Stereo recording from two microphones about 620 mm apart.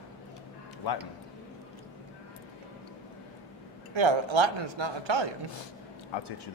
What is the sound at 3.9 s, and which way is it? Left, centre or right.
A man's voice, right.